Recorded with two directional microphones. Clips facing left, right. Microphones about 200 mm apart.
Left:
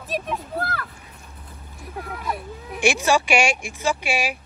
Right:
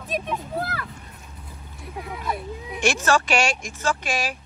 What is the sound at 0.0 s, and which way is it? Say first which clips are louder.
Speech: even; centre (ahead or behind).